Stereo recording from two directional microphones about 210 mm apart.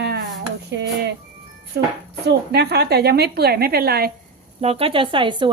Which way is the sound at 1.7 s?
50° right (ahead or behind).